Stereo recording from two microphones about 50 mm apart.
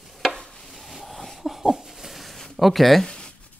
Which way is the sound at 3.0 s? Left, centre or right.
Centre.